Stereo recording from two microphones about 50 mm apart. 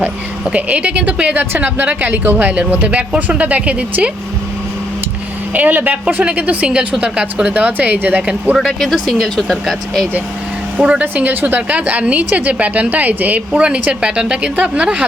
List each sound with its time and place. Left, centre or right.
0.4 s a woman's voice: right
5.5 s a woman's voice: right
6.7 s a woman's voice: centre; by 8.2 s right
8.5 s speech: centre
10.8 s speech: right
11.0 s a woman's voice: right
13.6 s a woman's voice: right